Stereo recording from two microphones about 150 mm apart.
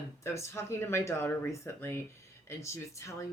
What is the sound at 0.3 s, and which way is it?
Speech, 20° left (ahead or behind).